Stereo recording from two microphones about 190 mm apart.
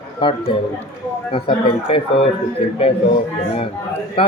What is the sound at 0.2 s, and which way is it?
Speech, 25° left (ahead or behind).